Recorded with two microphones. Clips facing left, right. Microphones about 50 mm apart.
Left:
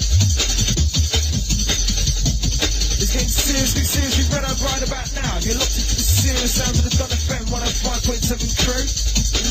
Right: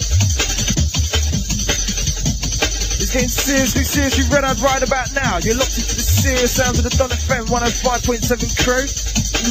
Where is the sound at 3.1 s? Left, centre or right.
Right.